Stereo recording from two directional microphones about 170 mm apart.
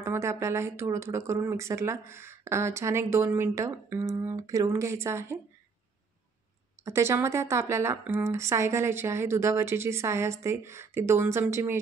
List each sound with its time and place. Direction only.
0.0 s speech: 15° right (ahead or behind)
6.8 s speech: 15° right (ahead or behind)